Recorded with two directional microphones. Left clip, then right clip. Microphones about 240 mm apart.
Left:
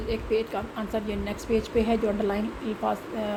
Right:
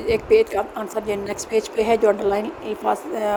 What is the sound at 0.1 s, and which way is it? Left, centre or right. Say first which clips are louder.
A woman's voice: right 11 dB; right.